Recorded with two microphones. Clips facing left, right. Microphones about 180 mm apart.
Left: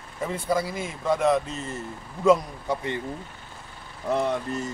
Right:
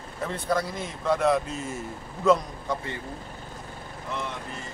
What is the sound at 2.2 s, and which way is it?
Speech, 10° left (ahead or behind).